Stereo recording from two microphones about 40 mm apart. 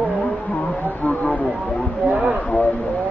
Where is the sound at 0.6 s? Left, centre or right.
Left.